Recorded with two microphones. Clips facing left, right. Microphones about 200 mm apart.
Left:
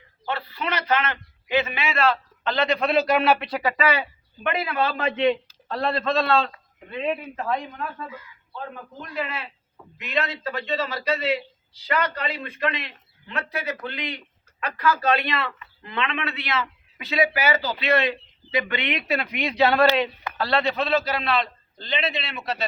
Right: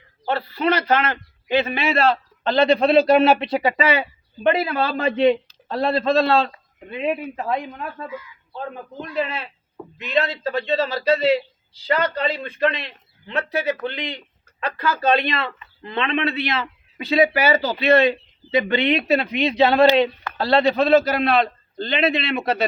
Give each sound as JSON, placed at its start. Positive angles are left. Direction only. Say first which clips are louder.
{"t": 0.3, "sound": "a man's voice", "louder": "right 8 dB", "side_deg": -35}
{"t": 6.9, "sound": "speech", "louder": "right 3 dB", "side_deg": -10}
{"t": 8.5, "sound": "a man's voice", "louder": "right 5 dB", "side_deg": -25}
{"t": 20.4, "sound": "a man's voice", "louder": "right 6 dB", "side_deg": -35}